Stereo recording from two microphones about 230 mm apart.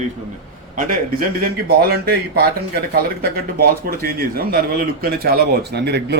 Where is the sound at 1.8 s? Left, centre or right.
Right.